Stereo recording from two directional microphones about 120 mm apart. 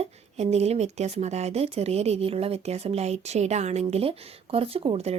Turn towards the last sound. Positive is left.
turn(degrees=-60)  # may be behind; listen again after turning